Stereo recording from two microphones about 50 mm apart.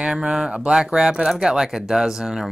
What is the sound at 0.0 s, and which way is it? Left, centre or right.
Speech, centre.